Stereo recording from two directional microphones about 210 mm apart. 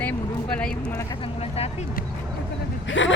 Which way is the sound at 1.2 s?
30° left (ahead or behind).